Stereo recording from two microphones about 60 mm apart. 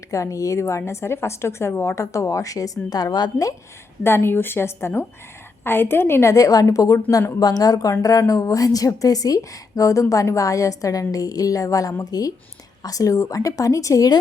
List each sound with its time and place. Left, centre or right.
0.1 s a woman's voice: left
0.6 s a woman's voice: left
2.9 s a woman's voice: left
4.0 s a woman's voice: left
6.3 s a woman's voice: left
8.3 s a woman's voice: left